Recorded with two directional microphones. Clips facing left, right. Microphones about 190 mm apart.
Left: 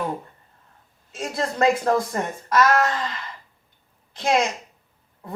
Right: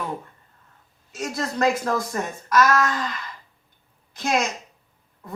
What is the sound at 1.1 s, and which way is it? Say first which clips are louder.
Speech: left 1 dB; 25° left (ahead or behind).